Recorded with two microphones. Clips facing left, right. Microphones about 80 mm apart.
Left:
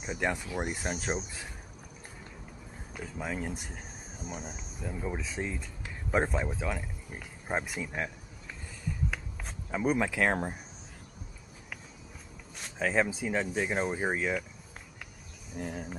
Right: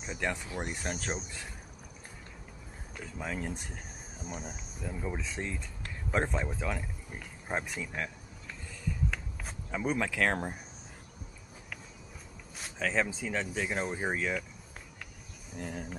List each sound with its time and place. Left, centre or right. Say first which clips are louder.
0.0 s speech: left 3 dB; centre
2.9 s speech: left 2 dB; centre
9.7 s speech: left 3 dB; centre
12.7 s speech: left 3 dB; centre
15.5 s speech: left 2 dB; centre